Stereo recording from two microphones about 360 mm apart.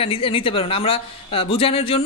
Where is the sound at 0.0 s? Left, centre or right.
Centre.